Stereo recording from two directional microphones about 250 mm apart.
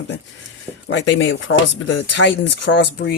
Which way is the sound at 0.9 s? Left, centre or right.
Left.